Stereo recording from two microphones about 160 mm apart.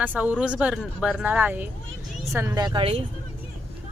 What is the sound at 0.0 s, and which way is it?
A woman's voice, 10° right (ahead or behind).